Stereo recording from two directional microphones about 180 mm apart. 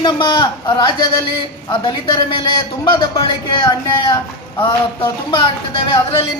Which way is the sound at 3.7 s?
20° left (ahead or behind).